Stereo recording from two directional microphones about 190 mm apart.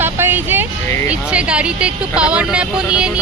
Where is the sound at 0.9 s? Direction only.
15° left (ahead or behind).